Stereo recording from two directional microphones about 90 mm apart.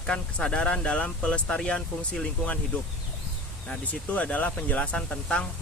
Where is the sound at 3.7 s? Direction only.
15° left (ahead or behind).